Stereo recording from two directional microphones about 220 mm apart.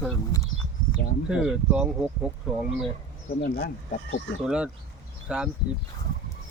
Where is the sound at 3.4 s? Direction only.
40° left (ahead or behind).